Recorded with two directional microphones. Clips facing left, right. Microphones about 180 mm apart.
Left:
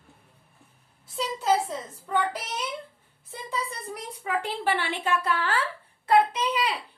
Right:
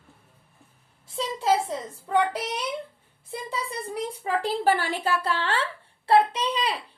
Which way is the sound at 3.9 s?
35° right (ahead or behind).